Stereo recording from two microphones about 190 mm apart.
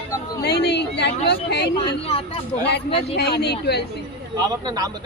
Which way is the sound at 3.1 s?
60° left (ahead or behind).